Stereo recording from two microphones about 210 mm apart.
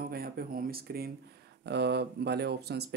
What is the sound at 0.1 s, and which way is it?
Speech, 45° right (ahead or behind).